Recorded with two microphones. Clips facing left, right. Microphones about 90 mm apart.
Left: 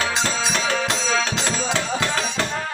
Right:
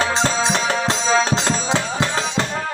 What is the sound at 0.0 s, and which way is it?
Music, 30° right (ahead or behind).